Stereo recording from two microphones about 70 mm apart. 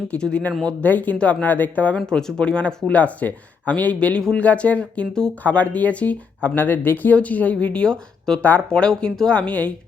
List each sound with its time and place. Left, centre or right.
0.1 s speech: centre
2.0 s speech: centre